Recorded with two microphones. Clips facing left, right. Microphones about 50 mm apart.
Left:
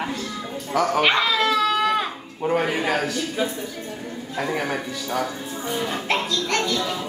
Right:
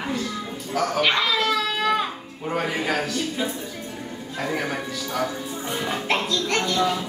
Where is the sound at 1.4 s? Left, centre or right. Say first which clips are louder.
Left 3 dB; centre.